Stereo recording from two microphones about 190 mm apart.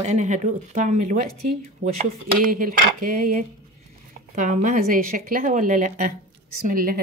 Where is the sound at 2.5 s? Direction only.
45° right (ahead or behind).